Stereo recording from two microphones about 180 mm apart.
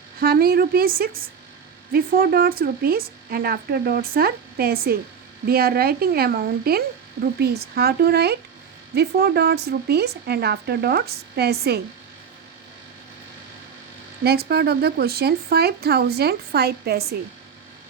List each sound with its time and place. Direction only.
0.2 s speech: 55° right (ahead or behind)
14.3 s speech: 60° right (ahead or behind)